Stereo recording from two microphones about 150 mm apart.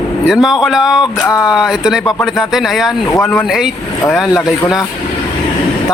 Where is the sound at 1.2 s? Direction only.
20° left (ahead or behind).